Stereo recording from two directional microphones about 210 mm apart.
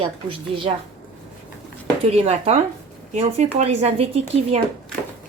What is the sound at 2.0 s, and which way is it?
A woman's voice, 30° right (ahead or behind).